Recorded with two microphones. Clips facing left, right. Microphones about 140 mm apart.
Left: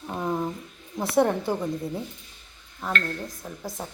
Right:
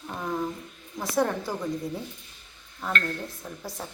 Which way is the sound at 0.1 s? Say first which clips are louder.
Left 3 dB; 20° left (ahead or behind).